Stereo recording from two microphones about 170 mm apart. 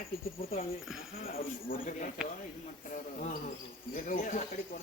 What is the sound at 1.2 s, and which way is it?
A man's voice, 60° left (ahead or behind).